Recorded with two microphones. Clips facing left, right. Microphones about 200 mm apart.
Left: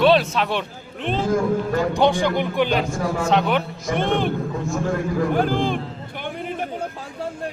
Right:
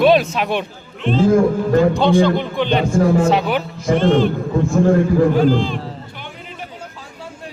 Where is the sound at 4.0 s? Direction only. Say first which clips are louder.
Right 6 dB; 55° left (ahead or behind).